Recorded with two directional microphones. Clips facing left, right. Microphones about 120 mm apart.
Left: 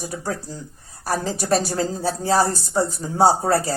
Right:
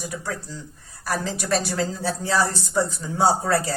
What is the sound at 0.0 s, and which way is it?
Speech, 35° left (ahead or behind).